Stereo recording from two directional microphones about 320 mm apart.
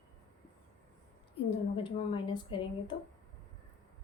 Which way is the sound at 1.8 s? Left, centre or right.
Centre.